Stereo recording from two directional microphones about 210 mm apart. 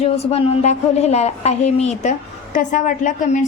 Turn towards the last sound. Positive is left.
turn(degrees=35)  # may be behind; listen again after turning